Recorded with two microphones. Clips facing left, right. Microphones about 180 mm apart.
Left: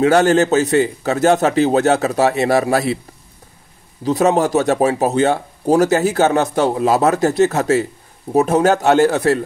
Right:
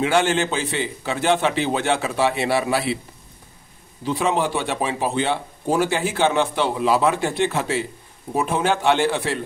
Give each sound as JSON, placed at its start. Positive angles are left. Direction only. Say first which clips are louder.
{"t": 0.0, "sound": "speech", "louder": "left 7 dB", "side_deg": 40}
{"t": 4.0, "sound": "speech", "louder": "left 7 dB", "side_deg": 40}